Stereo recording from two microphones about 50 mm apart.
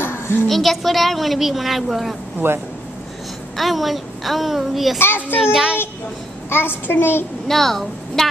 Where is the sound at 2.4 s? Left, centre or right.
Right.